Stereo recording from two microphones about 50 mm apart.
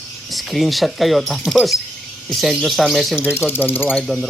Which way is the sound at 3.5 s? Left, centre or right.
Left.